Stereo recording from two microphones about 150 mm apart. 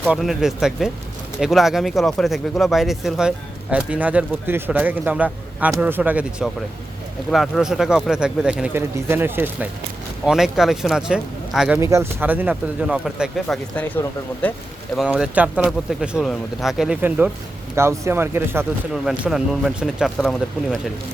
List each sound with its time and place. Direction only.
0.1 s speech: centre (ahead or behind)
10.2 s speech: 5° right (ahead or behind)
11.8 s speech: 20° right (ahead or behind); by 14.5 s 10° left (ahead or behind)
14.9 s speech: 5° right (ahead or behind)
19.0 s speech: centre (ahead or behind)